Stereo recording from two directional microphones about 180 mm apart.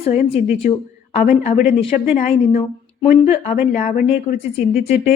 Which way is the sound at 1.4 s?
40° left (ahead or behind).